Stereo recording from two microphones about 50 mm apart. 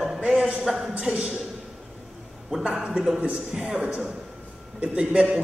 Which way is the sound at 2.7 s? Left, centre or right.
Centre.